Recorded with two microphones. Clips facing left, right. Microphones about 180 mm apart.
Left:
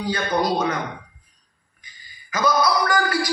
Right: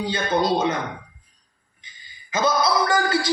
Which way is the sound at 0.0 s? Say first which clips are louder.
Even; 25° right (ahead or behind).